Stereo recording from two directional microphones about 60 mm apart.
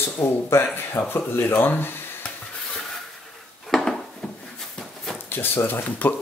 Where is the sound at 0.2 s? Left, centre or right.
Left.